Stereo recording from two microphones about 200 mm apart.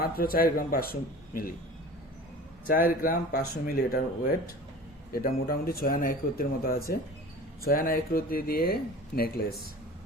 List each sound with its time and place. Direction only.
0.0 s speech: 45° left (ahead or behind)
2.6 s speech: 45° left (ahead or behind)